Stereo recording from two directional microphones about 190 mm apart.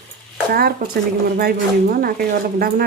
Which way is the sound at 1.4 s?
55° right (ahead or behind).